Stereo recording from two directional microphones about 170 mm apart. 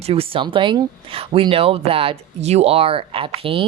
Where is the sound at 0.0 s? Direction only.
35° right (ahead or behind).